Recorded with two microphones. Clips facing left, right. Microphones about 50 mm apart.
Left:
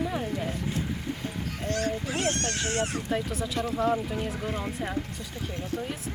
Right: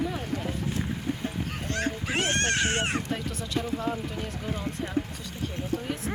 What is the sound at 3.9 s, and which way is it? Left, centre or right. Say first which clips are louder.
Speech: left 4 dB; centre.